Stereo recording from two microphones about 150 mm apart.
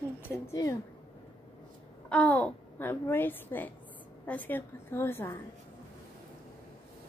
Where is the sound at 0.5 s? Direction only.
20° left (ahead or behind).